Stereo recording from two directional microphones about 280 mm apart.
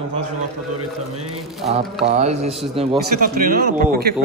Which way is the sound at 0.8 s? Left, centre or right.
Right.